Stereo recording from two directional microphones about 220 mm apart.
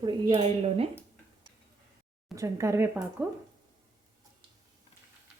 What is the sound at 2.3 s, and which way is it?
Speech, 15° right (ahead or behind).